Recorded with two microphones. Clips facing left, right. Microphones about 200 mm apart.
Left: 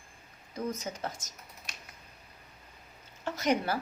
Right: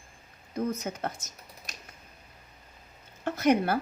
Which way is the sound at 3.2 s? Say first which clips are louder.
Right 5 dB; 55° right (ahead or behind).